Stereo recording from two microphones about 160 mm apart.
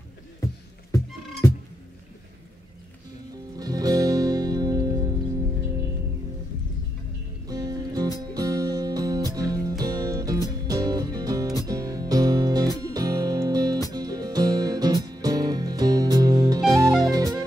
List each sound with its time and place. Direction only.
3.5 s music: 25° right (ahead or behind)
7.4 s music: 25° right (ahead or behind)